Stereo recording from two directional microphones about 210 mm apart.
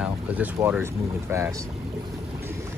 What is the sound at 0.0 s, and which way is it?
Speech, 5° right (ahead or behind).